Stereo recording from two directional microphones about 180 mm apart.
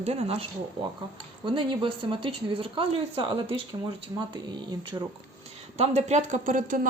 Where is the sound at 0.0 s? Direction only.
35° right (ahead or behind).